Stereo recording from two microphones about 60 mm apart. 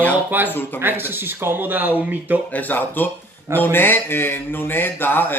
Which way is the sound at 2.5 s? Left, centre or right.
Left.